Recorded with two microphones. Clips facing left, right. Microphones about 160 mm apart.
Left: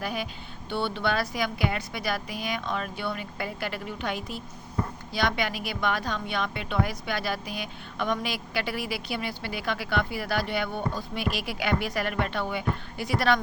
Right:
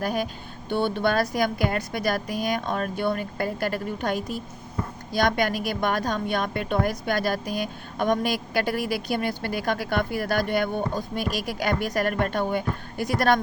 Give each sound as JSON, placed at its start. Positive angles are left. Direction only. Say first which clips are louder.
{"t": 0.0, "sound": "a woman's voice", "louder": "right 5 dB", "side_deg": -45}